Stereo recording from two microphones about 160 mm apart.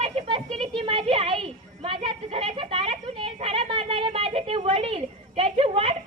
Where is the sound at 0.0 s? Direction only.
35° right (ahead or behind).